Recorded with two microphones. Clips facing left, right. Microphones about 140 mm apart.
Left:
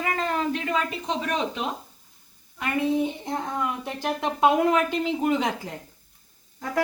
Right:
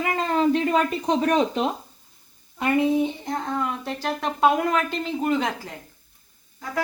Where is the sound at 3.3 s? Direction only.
10° left (ahead or behind).